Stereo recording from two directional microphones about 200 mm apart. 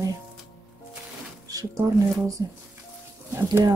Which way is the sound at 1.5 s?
15° right (ahead or behind).